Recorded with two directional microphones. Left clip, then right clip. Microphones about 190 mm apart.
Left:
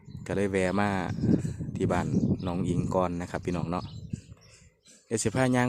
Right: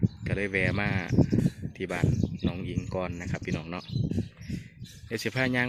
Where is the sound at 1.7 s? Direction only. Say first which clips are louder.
Left 4 dB; 25° left (ahead or behind).